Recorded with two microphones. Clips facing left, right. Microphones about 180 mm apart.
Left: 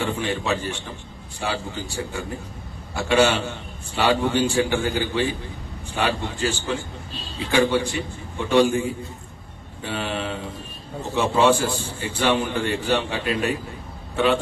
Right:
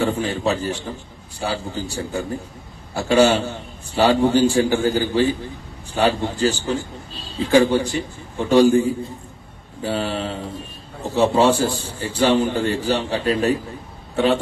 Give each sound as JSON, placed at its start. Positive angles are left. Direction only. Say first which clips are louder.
{"t": 0.0, "sound": "a man's voice", "louder": "right 4 dB", "side_deg": -35}